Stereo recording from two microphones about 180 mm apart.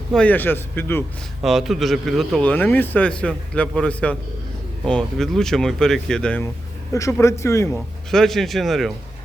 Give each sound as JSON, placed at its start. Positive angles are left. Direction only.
{"t": 0.1, "sound": "a man's voice", "side_deg": 5}
{"t": 1.4, "sound": "a man's voice", "side_deg": 0}
{"t": 6.9, "sound": "a man's voice", "side_deg": 15}
{"t": 8.1, "sound": "speech", "side_deg": 0}